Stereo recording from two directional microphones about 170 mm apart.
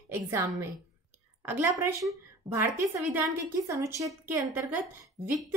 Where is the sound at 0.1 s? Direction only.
15° right (ahead or behind).